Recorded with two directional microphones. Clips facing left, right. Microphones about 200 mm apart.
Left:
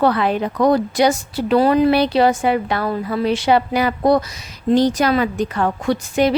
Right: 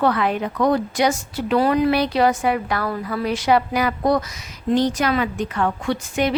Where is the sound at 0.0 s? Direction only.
30° left (ahead or behind).